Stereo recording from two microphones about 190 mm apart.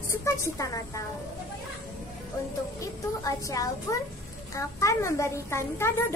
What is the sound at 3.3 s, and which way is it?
A woman's voice, 15° left (ahead or behind).